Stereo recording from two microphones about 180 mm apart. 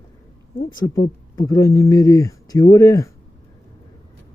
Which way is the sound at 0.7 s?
25° left (ahead or behind).